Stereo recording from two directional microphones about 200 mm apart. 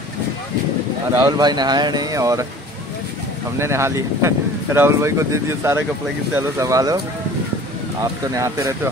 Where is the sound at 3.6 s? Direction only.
15° right (ahead or behind).